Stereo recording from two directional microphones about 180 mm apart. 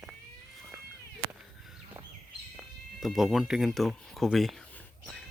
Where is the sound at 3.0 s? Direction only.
Centre (ahead or behind).